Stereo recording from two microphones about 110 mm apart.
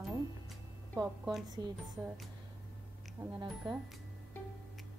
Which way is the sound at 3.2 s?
15° right (ahead or behind).